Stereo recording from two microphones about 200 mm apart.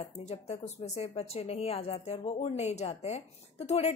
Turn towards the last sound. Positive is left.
turn(degrees=30)  # may be behind; listen again after turning